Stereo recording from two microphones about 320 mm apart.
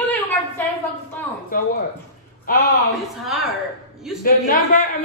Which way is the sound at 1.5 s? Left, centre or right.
Left.